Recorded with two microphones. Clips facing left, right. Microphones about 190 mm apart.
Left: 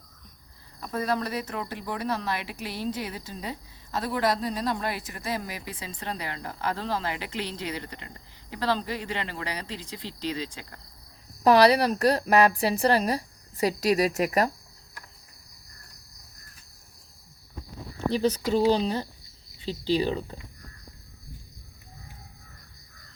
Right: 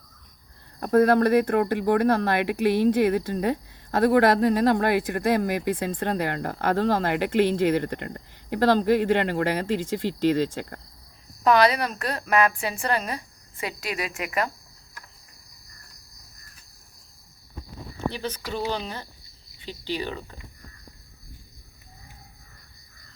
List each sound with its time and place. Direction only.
0.8 s speech: 60° right (ahead or behind)
11.4 s a woman's voice: 35° left (ahead or behind)
18.1 s a woman's voice: 35° left (ahead or behind)